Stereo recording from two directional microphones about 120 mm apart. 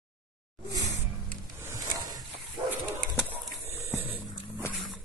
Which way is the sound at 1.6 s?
25° right (ahead or behind).